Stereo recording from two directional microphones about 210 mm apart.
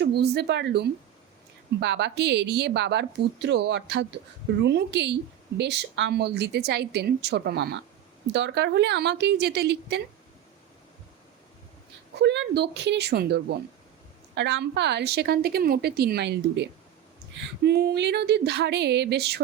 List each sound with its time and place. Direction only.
0.0 s a woman's voice: 50° right (ahead or behind)
12.2 s a woman's voice: 55° right (ahead or behind)